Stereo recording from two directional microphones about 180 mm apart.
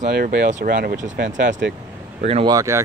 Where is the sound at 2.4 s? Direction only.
20° right (ahead or behind).